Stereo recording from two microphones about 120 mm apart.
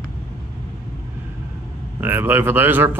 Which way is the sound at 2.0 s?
15° right (ahead or behind).